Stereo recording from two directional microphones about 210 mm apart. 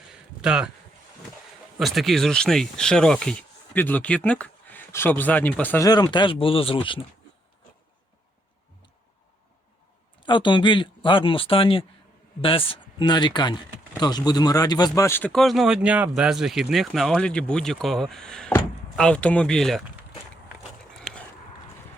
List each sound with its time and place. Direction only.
0.1 s a sound: 5° right (ahead or behind)
1.8 s speech: centre (ahead or behind); by 7.0 s 25° left (ahead or behind)
10.2 s speech: 20° left (ahead or behind); by 19.8 s centre (ahead or behind)